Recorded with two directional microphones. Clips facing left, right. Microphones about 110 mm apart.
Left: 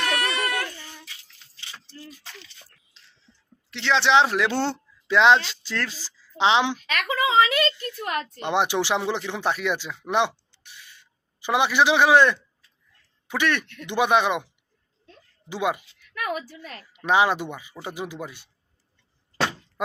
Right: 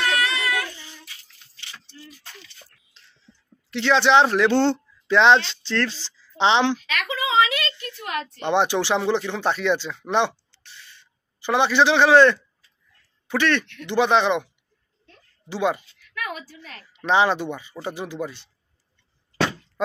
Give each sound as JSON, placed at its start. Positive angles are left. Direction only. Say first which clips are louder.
{"t": 0.1, "sound": "a sound", "louder": "right 2 dB", "side_deg": 55}
{"t": 3.7, "sound": "speech", "louder": "right 3 dB", "side_deg": 0}
{"t": 6.9, "sound": "a sound", "louder": "left 2 dB", "side_deg": 45}
{"t": 8.4, "sound": "speech", "louder": "right 3 dB", "side_deg": 5}
{"t": 15.5, "sound": "speech", "louder": "right 2 dB", "side_deg": 10}
{"t": 16.9, "sound": "speech", "louder": "right 1 dB", "side_deg": 10}